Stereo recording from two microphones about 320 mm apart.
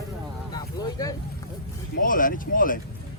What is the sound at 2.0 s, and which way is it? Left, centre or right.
Speech, left.